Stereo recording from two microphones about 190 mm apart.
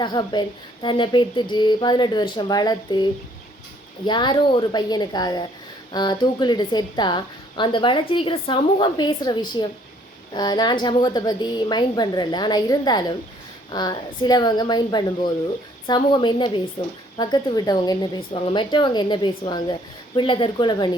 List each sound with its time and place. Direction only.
0.0 s a woman's voice: 25° left (ahead or behind)